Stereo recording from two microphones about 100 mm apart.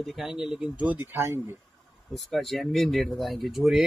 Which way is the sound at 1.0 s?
25° right (ahead or behind).